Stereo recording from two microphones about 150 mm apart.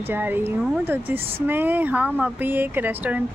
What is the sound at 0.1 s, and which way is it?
Speech, 15° right (ahead or behind).